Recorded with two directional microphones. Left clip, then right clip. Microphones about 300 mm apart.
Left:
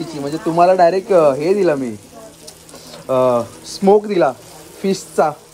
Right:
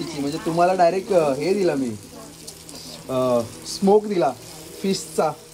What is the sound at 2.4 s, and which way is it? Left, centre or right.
Frying, centre.